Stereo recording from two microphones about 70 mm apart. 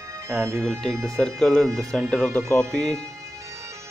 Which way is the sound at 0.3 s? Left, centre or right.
Right.